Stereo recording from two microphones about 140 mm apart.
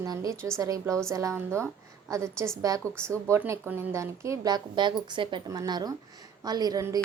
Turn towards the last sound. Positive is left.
turn(degrees=-25)  # may be behind; listen again after turning